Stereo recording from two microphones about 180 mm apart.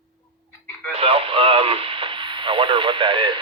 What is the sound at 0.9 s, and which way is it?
Radio, 30° right (ahead or behind).